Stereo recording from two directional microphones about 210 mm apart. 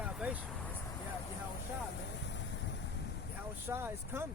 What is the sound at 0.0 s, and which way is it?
Vehicle, 5° right (ahead or behind).